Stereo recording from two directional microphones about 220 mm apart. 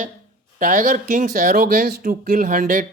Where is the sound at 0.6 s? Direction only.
35° right (ahead or behind).